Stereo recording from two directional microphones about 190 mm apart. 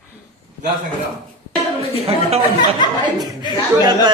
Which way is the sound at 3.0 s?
20° right (ahead or behind).